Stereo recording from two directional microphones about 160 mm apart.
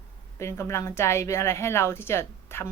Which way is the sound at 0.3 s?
20° left (ahead or behind).